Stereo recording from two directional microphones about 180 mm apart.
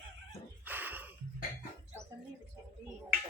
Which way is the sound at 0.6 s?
10° right (ahead or behind).